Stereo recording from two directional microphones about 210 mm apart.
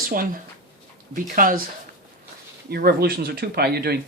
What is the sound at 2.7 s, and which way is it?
Speech, 45° right (ahead or behind).